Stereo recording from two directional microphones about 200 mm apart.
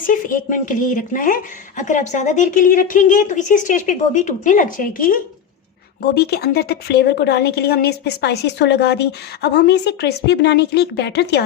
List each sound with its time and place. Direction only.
0.1 s a woman's voice: 40° left (ahead or behind)